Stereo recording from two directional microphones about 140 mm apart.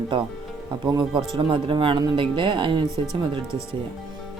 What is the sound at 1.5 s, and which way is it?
Speech, 40° right (ahead or behind).